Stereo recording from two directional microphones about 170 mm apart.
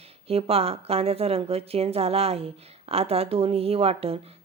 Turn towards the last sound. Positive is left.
turn(degrees=-35)  # may be behind; listen again after turning